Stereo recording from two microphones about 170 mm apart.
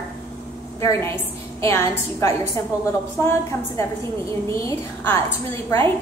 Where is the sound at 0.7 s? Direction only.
15° left (ahead or behind).